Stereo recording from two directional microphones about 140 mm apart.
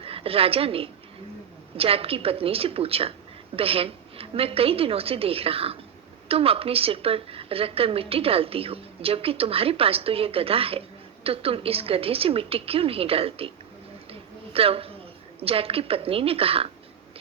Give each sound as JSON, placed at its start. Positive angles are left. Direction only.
{"t": 0.0, "sound": "a woman's voice", "side_deg": -45}
{"t": 14.1, "sound": "a sound", "side_deg": -45}
{"t": 15.4, "sound": "a woman's voice", "side_deg": -45}